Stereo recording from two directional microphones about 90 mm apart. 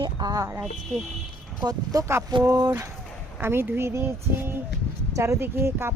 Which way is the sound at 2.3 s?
55° right (ahead or behind).